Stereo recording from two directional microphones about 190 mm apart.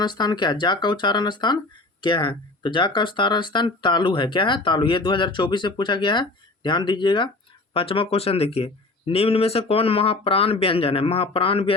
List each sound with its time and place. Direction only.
0.0 s speech: 20° left (ahead or behind)